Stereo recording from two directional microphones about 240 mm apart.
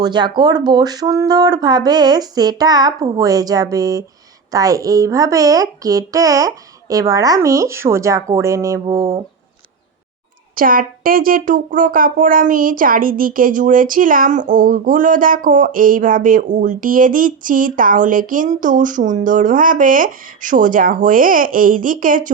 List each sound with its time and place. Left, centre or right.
0.0 s a child's voice: centre
10.5 s speech: right